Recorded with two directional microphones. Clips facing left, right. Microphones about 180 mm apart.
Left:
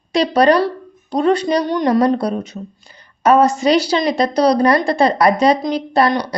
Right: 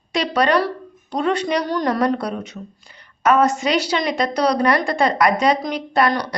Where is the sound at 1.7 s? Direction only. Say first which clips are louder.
Left 5 dB; 20° left (ahead or behind).